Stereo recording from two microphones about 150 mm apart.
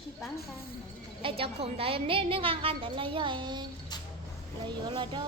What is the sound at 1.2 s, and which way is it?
A woman's voice, 40° right (ahead or behind).